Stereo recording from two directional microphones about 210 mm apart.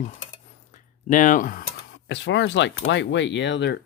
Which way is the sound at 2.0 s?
55° left (ahead or behind).